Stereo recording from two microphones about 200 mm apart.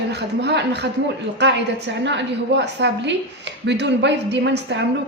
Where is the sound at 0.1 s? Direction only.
60° right (ahead or behind).